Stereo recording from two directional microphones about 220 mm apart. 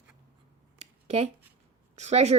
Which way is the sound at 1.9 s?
30° right (ahead or behind).